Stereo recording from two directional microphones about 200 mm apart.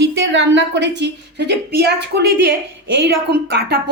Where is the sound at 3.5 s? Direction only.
50° right (ahead or behind).